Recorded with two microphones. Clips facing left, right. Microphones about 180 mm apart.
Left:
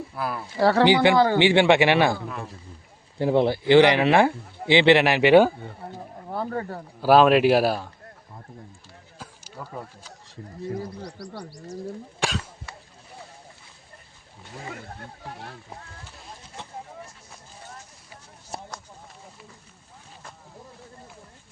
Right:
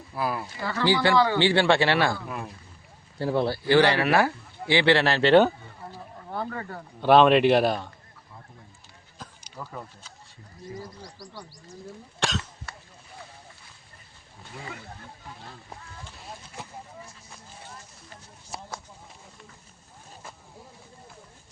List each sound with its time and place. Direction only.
0.1 s speech: centre (ahead or behind)
0.5 s speech: 70° left (ahead or behind)
0.9 s a man's voice: 20° left (ahead or behind)
6.0 s wild animals: 40° left (ahead or behind)
7.0 s speech: 5° left (ahead or behind)
9.1 s a sound: 10° left (ahead or behind)
10.2 s speech: 85° left
12.2 s cough: 10° left (ahead or behind)
14.7 s speech: 50° left (ahead or behind)
15.2 s speech: 70° left (ahead or behind)